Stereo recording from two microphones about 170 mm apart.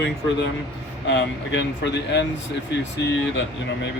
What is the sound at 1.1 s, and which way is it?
Speech, 90° left.